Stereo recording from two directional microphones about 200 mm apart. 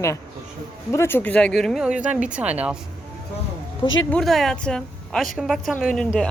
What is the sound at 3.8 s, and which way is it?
Speech, 25° left (ahead or behind).